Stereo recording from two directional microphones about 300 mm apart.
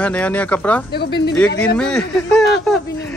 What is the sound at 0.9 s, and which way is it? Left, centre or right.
Speech, left.